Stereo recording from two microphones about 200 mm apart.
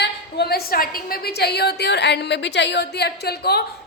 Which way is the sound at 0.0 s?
55° left (ahead or behind).